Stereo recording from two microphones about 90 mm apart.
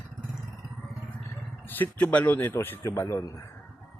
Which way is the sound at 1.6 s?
20° left (ahead or behind).